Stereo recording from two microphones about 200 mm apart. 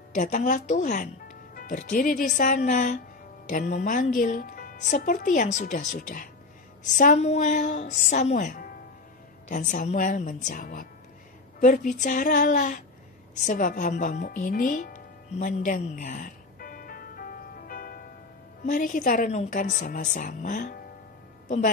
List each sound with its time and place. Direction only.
0.1 s a woman's voice: 40° left (ahead or behind)
13.4 s music: 40° left (ahead or behind)
18.7 s a woman's voice: 40° left (ahead or behind)